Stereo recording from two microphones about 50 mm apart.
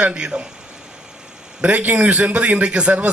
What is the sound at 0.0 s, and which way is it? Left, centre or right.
Speech, right.